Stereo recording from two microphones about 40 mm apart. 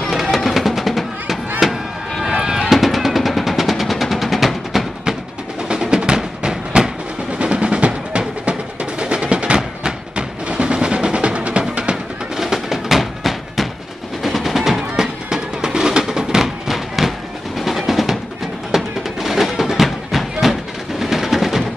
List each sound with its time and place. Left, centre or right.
0.1 s music: centre
2.3 s a sound: centre
2.8 s music: centre
5.6 s music: centre
7.3 s drum: right
9.0 s train: right
11.7 s music: right
12.4 s a sound: centre
14.2 s music: centre
15.2 s music: centre
17.6 s train: centre
18.8 s music: centre
21.0 s a sound: centre